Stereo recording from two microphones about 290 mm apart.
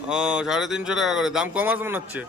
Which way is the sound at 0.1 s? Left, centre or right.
Centre.